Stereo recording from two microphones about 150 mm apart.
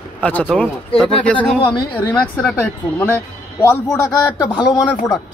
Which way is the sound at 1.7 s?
30° left (ahead or behind).